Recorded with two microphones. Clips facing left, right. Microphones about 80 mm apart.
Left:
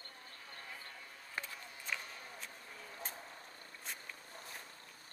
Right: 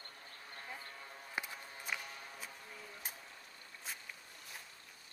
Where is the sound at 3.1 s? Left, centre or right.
Left.